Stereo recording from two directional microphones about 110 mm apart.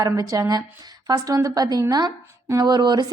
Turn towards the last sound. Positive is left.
turn(degrees=-40)  # may be behind; listen again after turning